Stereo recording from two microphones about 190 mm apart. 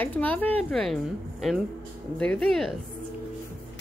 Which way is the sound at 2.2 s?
5° left (ahead or behind).